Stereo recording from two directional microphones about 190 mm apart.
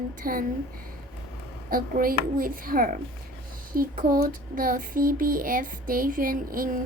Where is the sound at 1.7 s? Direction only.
50° right (ahead or behind).